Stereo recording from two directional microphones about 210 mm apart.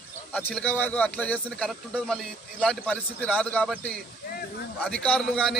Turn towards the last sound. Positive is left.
turn(degrees=0)  # may be behind; listen again after turning